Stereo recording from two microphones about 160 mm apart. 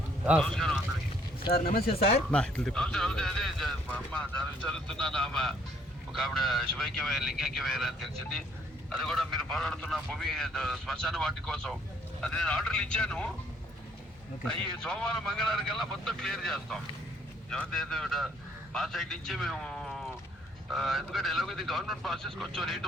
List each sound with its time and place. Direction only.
0.3 s speech: 5° left (ahead or behind)
1.5 s speech: 70° left (ahead or behind)
2.3 s speech: 5° left (ahead or behind)
14.4 s a man's voice: 5° left (ahead or behind)